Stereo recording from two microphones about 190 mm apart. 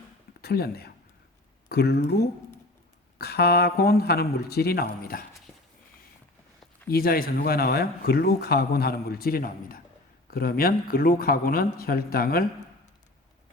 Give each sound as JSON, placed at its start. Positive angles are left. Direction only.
{"t": 0.4, "sound": "speech", "side_deg": 55}
{"t": 6.8, "sound": "speech", "side_deg": 50}